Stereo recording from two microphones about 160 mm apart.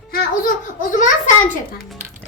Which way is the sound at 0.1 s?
65° left (ahead or behind).